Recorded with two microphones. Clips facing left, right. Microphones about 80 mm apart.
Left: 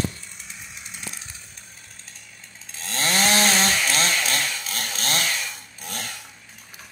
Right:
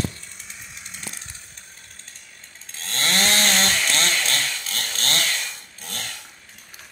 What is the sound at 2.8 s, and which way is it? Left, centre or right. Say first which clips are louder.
Chainsaw: left 1 dB; centre.